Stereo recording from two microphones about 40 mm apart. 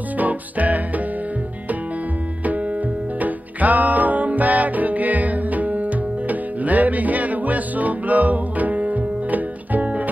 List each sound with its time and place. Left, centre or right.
0.2 s music: right
3.2 s music: right